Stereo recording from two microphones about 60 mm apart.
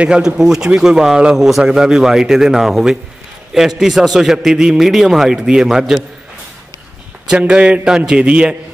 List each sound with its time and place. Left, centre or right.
0.0 s a man's voice: centre
7.2 s a man's voice: centre